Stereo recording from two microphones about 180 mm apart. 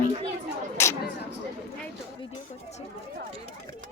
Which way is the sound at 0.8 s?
15° left (ahead or behind).